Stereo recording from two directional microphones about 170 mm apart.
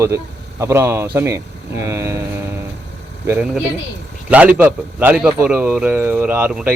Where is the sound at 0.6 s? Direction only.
15° right (ahead or behind).